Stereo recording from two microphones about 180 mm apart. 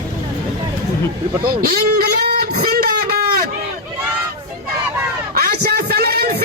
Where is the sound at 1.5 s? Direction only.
55° right (ahead or behind).